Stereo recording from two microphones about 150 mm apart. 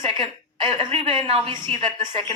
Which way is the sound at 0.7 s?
35° right (ahead or behind).